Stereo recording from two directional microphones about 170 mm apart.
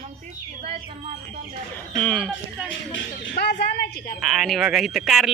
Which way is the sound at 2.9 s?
85° left.